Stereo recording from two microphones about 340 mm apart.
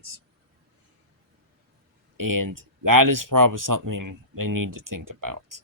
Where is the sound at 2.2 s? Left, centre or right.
Right.